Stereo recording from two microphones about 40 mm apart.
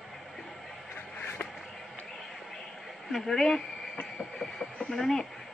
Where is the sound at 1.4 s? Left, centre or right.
Left.